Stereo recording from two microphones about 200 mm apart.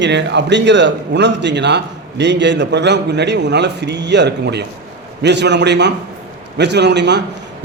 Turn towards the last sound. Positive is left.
turn(degrees=-60)  # may be behind; listen again after turning